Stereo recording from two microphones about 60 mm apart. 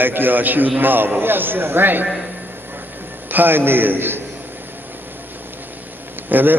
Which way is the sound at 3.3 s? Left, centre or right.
Right.